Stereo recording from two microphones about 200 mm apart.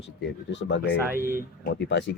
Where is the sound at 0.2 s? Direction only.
65° left (ahead or behind).